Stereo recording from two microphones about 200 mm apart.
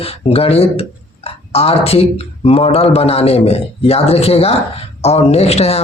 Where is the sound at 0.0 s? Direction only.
30° left (ahead or behind).